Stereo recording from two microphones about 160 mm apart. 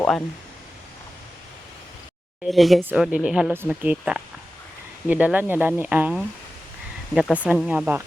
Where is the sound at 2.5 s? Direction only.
Centre (ahead or behind).